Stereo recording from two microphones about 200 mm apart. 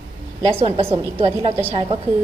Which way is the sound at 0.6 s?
30° right (ahead or behind).